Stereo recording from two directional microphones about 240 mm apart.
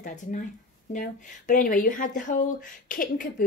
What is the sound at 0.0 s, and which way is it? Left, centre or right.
Speech, left.